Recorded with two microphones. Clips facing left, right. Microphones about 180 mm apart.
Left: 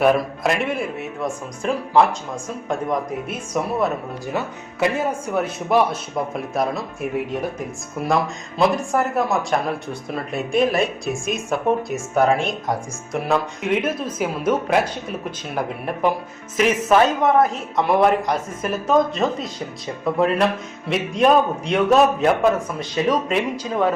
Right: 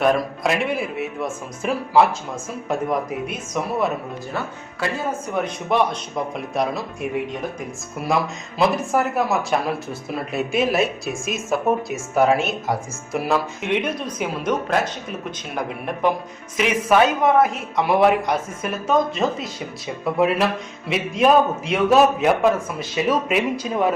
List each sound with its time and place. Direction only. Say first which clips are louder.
0.0 s speech: left 2 dB; 5° left (ahead or behind)
4.4 s speech: left 6 dB; 20° left (ahead or behind)
5.3 s speech: left 2 dB; 5° left (ahead or behind)
8.0 s speech: left 1 dB; centre (ahead or behind)
16.6 s speech: left 1 dB; centre (ahead or behind)